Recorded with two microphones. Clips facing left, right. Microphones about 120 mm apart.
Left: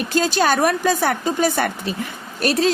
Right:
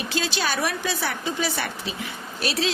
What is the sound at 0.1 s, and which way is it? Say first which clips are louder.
A woman's voice: left 9 dB; 45° left (ahead or behind).